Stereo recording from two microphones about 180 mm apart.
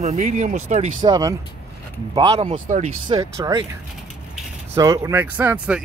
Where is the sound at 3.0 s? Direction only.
20° right (ahead or behind).